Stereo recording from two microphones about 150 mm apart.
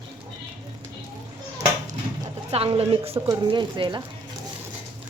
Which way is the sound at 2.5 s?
40° right (ahead or behind).